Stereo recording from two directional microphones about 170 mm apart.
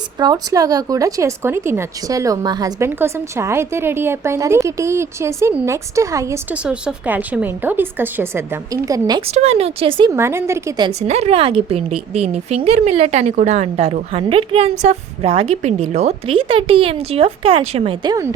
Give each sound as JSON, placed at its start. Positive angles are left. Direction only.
{"t": 0.2, "sound": "speech", "side_deg": -25}
{"t": 9.3, "sound": "a woman's voice", "side_deg": -40}
{"t": 10.1, "sound": "speech", "side_deg": -15}
{"t": 10.8, "sound": "a woman's voice", "side_deg": -40}